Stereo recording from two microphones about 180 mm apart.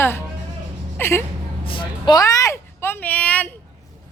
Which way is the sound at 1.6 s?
30° left (ahead or behind).